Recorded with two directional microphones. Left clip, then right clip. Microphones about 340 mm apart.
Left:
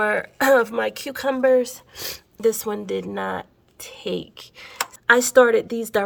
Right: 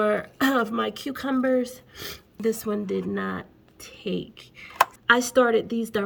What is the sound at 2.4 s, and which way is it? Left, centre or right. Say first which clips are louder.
Speech: left 5 dB; centre.